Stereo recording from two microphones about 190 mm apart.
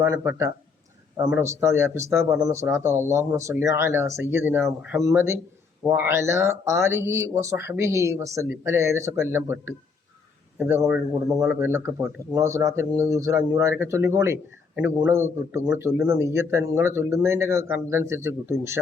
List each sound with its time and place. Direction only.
0.0 s speech: 15° right (ahead or behind)